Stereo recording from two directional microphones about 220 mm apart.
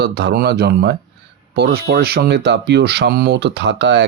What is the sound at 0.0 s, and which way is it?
Speech, 50° right (ahead or behind).